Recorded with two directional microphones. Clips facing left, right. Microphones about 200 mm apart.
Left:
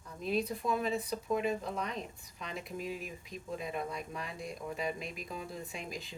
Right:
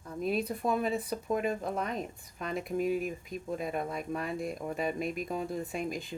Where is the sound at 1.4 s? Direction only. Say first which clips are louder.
Right 2 dB; 50° right (ahead or behind).